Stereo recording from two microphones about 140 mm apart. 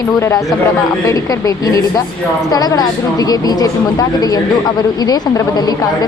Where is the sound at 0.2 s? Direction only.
20° left (ahead or behind).